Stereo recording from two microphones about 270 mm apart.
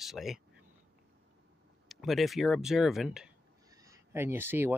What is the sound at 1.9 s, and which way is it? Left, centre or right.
Speech, centre.